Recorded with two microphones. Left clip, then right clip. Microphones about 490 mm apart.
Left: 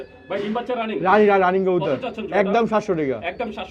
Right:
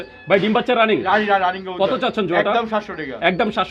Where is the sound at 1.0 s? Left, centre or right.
Left.